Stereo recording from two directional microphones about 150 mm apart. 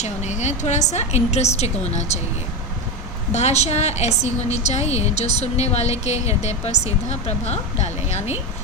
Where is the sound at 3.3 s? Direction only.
50° left (ahead or behind).